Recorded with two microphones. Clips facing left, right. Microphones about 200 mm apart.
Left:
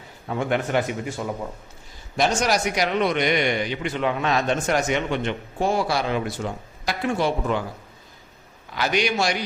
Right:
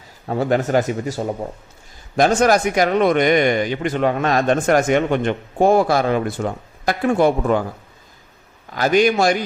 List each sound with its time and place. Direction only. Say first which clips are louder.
0.3 s a man's voice: right 5 dB; 40° right (ahead or behind)
2.1 s a man's voice: right 7 dB; 50° right (ahead or behind)
8.7 s a man's voice: right 8 dB; 45° right (ahead or behind)